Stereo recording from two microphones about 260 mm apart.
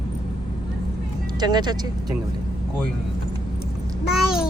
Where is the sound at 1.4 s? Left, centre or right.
Centre.